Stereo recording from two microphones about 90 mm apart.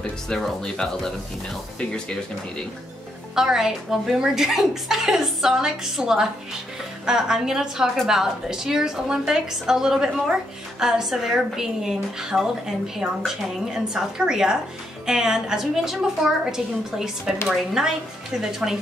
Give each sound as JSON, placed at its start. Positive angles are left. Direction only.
{"t": 0.3, "sound": "speech", "side_deg": 5}
{"t": 3.3, "sound": "a woman's voice", "side_deg": -5}